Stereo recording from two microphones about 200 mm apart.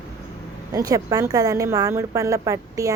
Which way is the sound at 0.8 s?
15° right (ahead or behind).